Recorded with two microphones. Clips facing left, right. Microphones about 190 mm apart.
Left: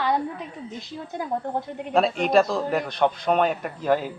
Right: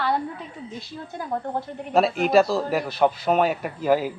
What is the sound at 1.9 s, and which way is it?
Speech, 5° right (ahead or behind).